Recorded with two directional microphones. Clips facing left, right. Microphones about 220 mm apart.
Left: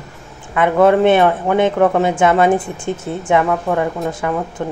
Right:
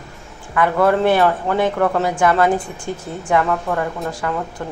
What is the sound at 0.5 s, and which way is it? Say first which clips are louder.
A woman's voice: left 4 dB; 20° left (ahead or behind).